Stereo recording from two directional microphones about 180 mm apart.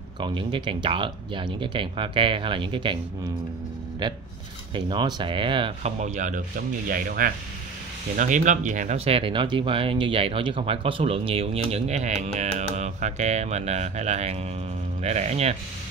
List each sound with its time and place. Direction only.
0.2 s speech: 25° right (ahead or behind)
4.0 s speech: 25° right (ahead or behind)